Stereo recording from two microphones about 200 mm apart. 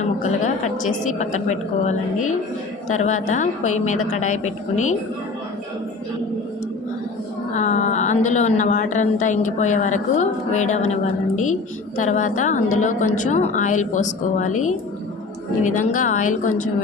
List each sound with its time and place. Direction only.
0.0 s a woman's voice: 35° left (ahead or behind)
3.0 s a woman's voice: 35° left (ahead or behind)
7.5 s a woman's voice: 35° left (ahead or behind)
15.6 s a woman's voice: 40° left (ahead or behind)